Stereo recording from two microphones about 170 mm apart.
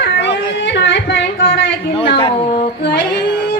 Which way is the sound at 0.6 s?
90° left.